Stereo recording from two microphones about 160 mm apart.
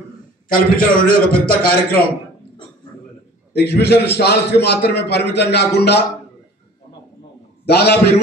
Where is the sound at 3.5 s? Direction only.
90° left.